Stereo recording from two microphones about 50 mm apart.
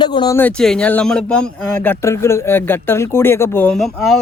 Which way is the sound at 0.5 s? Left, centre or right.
Centre.